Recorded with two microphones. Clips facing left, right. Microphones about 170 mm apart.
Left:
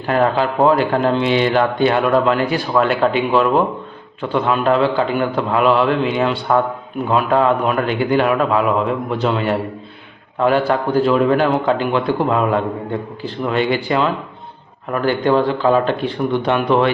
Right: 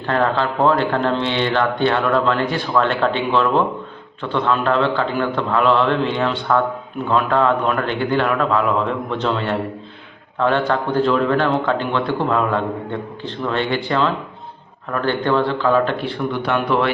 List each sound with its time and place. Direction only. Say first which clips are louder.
0.1 s speech: left 3 dB; 15° left (ahead or behind)